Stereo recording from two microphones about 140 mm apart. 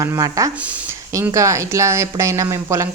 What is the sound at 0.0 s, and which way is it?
A woman's voice, 25° right (ahead or behind).